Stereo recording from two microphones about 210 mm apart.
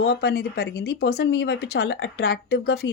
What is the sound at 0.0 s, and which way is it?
Speech, 50° left (ahead or behind).